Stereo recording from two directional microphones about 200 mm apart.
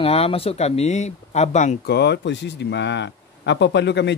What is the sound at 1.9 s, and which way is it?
A man's voice, 55° left (ahead or behind).